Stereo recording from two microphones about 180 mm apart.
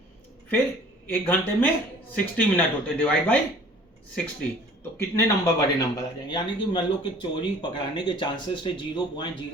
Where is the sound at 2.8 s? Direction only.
5° left (ahead or behind).